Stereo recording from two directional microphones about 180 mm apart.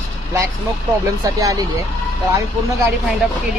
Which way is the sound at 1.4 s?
20° right (ahead or behind).